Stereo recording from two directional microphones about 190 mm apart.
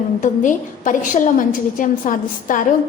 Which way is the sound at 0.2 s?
40° left (ahead or behind).